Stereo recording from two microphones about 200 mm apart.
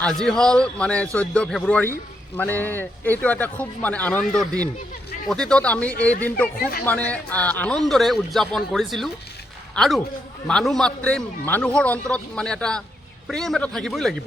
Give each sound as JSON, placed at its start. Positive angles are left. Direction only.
{"t": 0.0, "sound": "a man's voice", "side_deg": 5}
{"t": 6.6, "sound": "speech", "side_deg": 45}
{"t": 6.8, "sound": "a man's voice", "side_deg": 5}